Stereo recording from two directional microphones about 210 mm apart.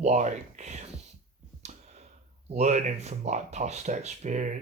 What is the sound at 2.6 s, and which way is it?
Speech, 35° right (ahead or behind).